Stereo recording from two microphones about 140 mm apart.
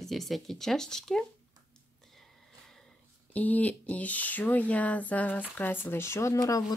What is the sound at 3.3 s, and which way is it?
Speech, 10° left (ahead or behind).